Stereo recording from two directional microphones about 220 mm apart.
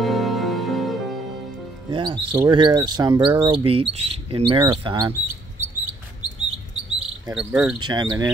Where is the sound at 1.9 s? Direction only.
20° right (ahead or behind).